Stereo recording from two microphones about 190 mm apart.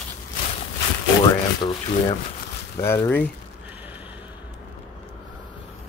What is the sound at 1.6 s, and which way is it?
Rub, 25° left (ahead or behind).